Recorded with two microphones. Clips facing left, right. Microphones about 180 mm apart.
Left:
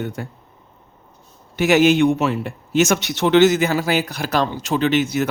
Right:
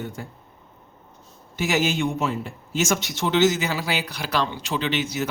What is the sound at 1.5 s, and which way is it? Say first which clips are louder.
A man's voice: left 9 dB; 65° left (ahead or behind).